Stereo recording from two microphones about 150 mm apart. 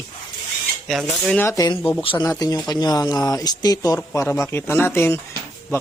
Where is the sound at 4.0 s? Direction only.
15° left (ahead or behind).